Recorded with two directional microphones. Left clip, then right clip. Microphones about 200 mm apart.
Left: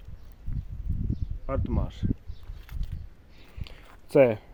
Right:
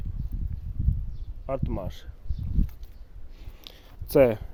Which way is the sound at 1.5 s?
10° right (ahead or behind).